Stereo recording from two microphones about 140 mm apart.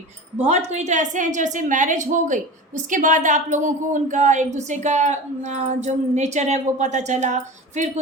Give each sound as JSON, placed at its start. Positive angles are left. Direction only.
{"t": 0.3, "sound": "a woman's voice", "side_deg": -50}